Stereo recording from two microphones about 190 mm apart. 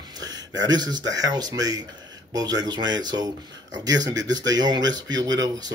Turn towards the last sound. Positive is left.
turn(degrees=-20)  # may be behind; listen again after turning